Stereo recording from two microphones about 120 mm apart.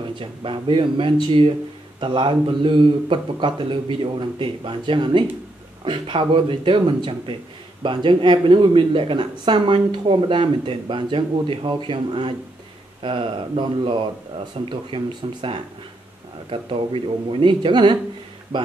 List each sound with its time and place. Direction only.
0.2 s speech: 45° right (ahead or behind)
16.4 s speech: 50° right (ahead or behind)